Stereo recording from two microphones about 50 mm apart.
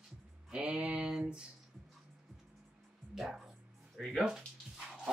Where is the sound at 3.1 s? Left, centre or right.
Centre.